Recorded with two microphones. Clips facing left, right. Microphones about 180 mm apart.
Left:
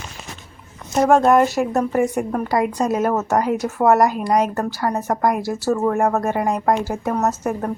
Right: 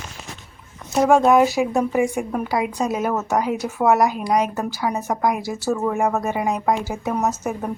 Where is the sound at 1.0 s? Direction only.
Centre (ahead or behind).